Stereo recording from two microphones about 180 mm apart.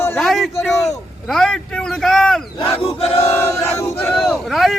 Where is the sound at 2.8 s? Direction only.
35° left (ahead or behind).